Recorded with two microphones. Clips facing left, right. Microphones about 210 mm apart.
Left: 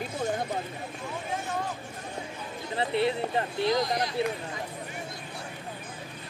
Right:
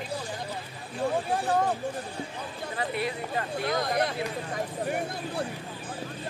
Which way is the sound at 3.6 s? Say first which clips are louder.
Even; 55° right (ahead or behind).